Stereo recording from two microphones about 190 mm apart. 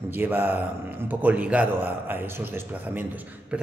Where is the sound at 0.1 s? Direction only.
10° right (ahead or behind).